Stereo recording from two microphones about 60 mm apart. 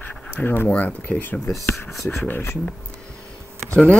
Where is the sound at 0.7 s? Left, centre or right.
Left.